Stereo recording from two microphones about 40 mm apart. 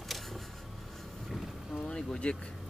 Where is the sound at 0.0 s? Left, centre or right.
Centre.